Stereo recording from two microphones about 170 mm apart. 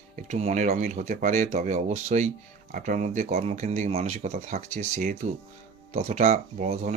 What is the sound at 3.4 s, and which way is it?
Speech, 40° right (ahead or behind).